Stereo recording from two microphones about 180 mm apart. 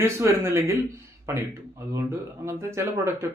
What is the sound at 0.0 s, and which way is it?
A man's voice, 15° right (ahead or behind).